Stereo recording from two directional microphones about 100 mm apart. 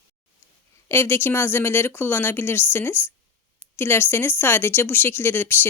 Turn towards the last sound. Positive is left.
turn(degrees=25)  # may be behind; listen again after turning